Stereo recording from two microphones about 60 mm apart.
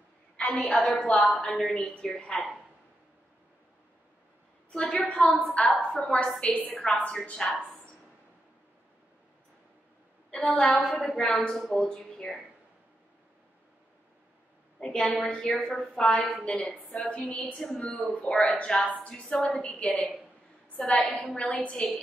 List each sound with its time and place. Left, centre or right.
0.4 s a woman's voice: left
5.0 s a woman's voice: centre
10.3 s a woman's voice: centre
14.8 s a woman's voice: centre
15.6 s a woman's voice: centre
16.4 s a woman's voice: centre
17.3 s a woman's voice: centre
18.1 s a woman's voice: centre